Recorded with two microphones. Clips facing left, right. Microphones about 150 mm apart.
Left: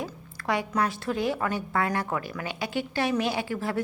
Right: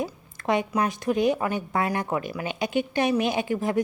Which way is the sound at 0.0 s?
20° right (ahead or behind).